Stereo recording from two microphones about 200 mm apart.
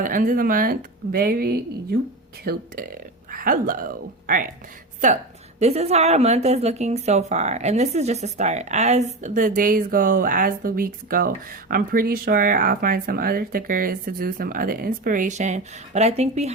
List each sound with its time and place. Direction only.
0.0 s speech: 40° right (ahead or behind)
5.5 s speech: 30° right (ahead or behind)